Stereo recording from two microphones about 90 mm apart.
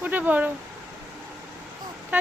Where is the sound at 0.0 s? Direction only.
20° right (ahead or behind).